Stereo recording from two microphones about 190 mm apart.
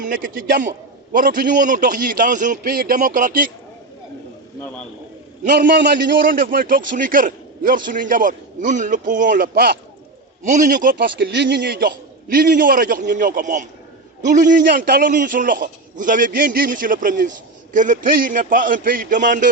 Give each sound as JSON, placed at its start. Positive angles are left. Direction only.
{"t": 0.0, "sound": "a man's voice", "side_deg": -45}
{"t": 5.5, "sound": "a man's voice", "side_deg": -60}
{"t": 10.4, "sound": "a man's voice", "side_deg": -40}